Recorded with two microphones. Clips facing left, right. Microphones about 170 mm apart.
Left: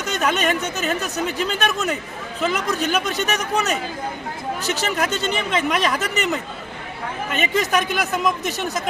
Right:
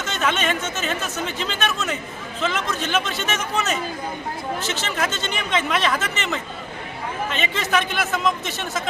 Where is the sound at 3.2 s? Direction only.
35° left (ahead or behind).